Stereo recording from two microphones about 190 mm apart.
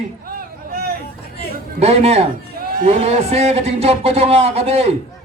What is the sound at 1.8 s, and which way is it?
Speech, 35° right (ahead or behind).